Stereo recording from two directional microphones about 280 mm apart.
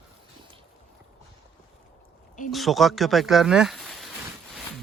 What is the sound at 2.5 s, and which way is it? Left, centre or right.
Speech, centre.